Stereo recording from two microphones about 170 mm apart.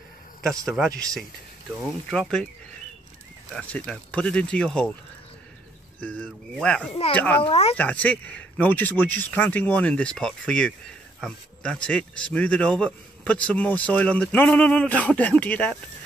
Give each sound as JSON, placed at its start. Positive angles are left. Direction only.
{"t": 0.4, "sound": "speech", "side_deg": 5}
{"t": 2.0, "sound": "speech", "side_deg": 5}
{"t": 3.5, "sound": "speech", "side_deg": 5}
{"t": 5.9, "sound": "speech", "side_deg": 5}
{"t": 6.9, "sound": "speech", "side_deg": 35}
{"t": 7.2, "sound": "speech", "side_deg": 10}
{"t": 7.4, "sound": "speech", "side_deg": 35}
{"t": 7.7, "sound": "speech", "side_deg": 10}